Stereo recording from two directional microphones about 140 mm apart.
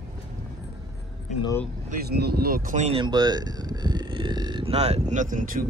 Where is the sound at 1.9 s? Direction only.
90° right.